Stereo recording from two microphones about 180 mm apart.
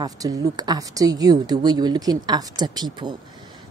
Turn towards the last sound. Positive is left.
turn(degrees=-25)  # may be behind; listen again after turning